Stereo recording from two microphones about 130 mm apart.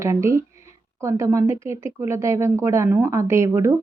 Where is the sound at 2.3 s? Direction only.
25° right (ahead or behind).